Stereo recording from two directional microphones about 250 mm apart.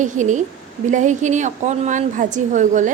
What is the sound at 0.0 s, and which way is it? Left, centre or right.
A woman's voice, right.